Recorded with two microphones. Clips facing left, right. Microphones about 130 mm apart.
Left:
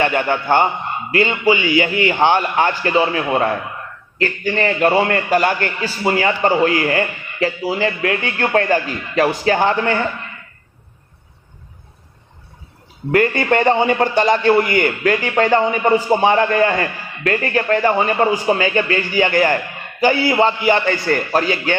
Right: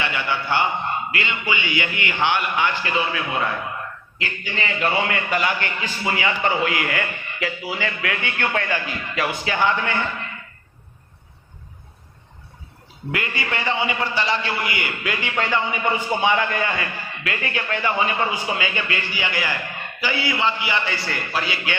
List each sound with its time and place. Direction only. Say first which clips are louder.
0.0 s a man's voice: left 8 dB; 45° left (ahead or behind)
1.1 s a man's voice: left 10 dB; 35° left (ahead or behind)
13.1 s a man's voice: left 12 dB; 45° left (ahead or behind)